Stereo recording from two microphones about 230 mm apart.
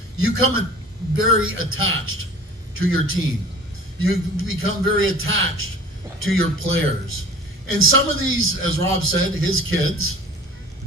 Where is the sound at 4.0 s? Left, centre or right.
Right.